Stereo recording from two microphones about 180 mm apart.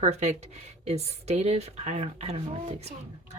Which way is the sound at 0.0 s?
40° right (ahead or behind).